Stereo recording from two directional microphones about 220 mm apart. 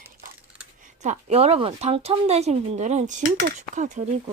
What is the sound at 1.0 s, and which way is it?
Speech, 30° right (ahead or behind).